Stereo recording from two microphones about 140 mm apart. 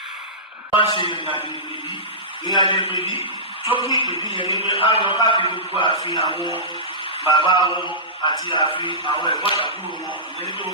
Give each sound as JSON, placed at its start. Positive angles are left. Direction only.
{"t": 0.9, "sound": "a man's voice", "side_deg": 35}